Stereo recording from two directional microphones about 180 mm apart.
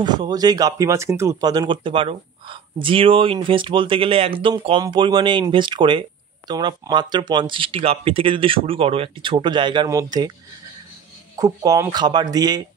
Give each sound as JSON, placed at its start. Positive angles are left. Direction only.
{"t": 0.0, "sound": "speech", "side_deg": -25}
{"t": 11.3, "sound": "speech", "side_deg": -20}